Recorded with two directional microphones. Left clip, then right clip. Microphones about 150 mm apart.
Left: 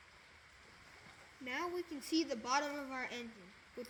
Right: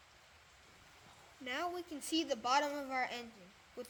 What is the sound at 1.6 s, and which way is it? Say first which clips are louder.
Speech: right 1 dB; 90° right.